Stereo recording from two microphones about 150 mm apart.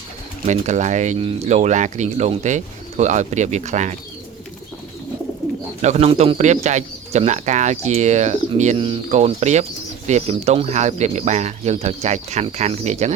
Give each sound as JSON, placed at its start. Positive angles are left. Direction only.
{"t": 0.4, "sound": "speech", "side_deg": -50}
{"t": 5.8, "sound": "speech", "side_deg": -45}